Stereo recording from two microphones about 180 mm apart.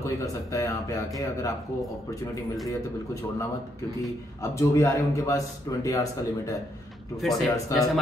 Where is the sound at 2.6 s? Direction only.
20° left (ahead or behind).